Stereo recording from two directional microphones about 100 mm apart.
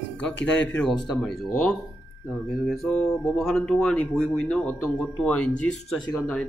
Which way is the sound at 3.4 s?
5° left (ahead or behind).